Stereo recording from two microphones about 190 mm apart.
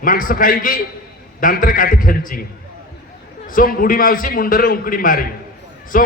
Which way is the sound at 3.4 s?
45° left (ahead or behind).